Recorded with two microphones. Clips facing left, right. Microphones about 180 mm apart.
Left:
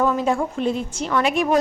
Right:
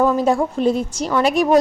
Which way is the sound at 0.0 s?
35° right (ahead or behind).